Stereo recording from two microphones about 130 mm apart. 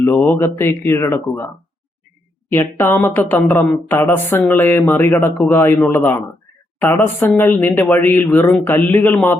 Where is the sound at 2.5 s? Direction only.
15° left (ahead or behind).